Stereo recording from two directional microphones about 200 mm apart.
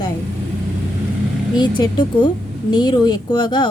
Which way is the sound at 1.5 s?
20° left (ahead or behind).